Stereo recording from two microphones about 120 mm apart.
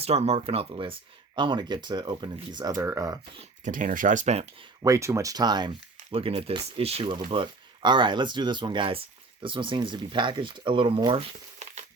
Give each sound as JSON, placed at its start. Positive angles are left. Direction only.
{"t": 0.0, "sound": "speech", "side_deg": -60}
{"t": 2.7, "sound": "speech", "side_deg": -20}
{"t": 3.6, "sound": "speech", "side_deg": -90}
{"t": 4.8, "sound": "speech", "side_deg": -25}
{"t": 6.1, "sound": "speech", "side_deg": -50}
{"t": 11.6, "sound": "a sound", "side_deg": -70}